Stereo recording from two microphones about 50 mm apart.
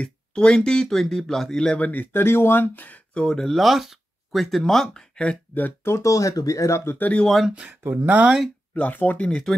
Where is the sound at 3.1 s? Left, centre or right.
Centre.